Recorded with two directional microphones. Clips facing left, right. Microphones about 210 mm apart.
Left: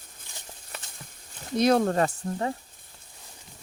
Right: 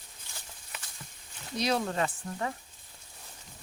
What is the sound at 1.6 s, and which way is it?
Speech, 50° left (ahead or behind).